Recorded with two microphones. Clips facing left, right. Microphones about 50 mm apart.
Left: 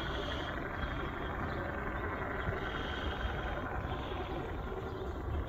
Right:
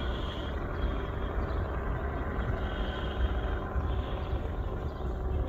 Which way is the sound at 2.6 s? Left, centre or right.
Centre.